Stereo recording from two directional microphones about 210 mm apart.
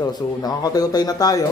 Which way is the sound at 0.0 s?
20° left (ahead or behind).